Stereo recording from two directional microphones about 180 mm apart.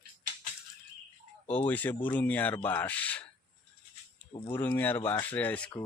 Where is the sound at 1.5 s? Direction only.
10° left (ahead or behind).